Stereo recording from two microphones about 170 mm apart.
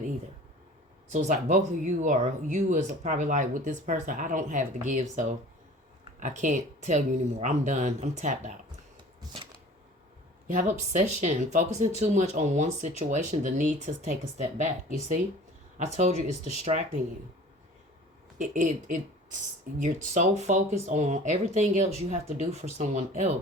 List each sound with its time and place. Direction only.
1.1 s speech: 45° right (ahead or behind)
10.4 s speech: 50° right (ahead or behind)
18.3 s speech: 50° right (ahead or behind)